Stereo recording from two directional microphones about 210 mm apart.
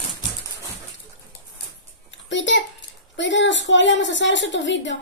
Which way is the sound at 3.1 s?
60° left (ahead or behind).